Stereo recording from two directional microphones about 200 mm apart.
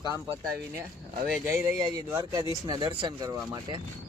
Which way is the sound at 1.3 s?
10° right (ahead or behind).